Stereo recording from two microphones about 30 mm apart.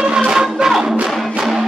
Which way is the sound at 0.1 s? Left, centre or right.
Right.